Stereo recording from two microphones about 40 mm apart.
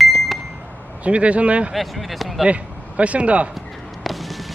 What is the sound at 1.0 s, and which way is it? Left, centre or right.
Speech, right.